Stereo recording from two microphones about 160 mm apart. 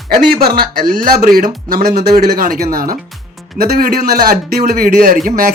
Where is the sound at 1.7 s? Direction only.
75° right (ahead or behind); by 5.5 s 60° right (ahead or behind).